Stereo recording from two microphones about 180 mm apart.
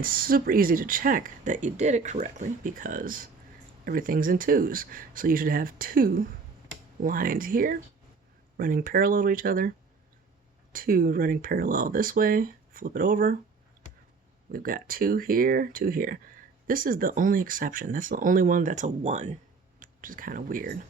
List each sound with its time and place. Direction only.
0.0 s speech: 55° right (ahead or behind)
14.5 s speech: 50° right (ahead or behind)
19.8 s speech: 50° right (ahead or behind)